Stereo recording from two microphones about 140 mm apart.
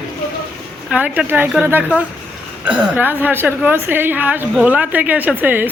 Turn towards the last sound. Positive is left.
turn(degrees=-15)  # may be behind; listen again after turning